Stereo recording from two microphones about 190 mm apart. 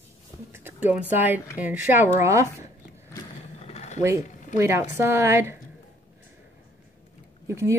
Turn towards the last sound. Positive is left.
turn(degrees=-15)  # may be behind; listen again after turning